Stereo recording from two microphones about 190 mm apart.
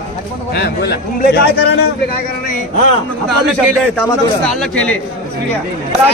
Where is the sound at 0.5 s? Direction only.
55° left (ahead or behind).